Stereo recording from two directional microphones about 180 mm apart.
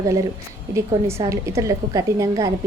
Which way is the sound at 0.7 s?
15° right (ahead or behind).